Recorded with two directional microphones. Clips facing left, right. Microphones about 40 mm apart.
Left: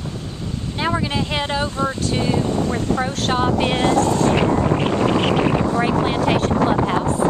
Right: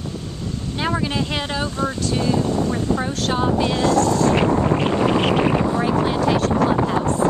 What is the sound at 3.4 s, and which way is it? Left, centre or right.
Speech, left.